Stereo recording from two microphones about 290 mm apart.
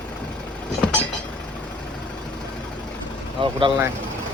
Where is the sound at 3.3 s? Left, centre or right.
Centre.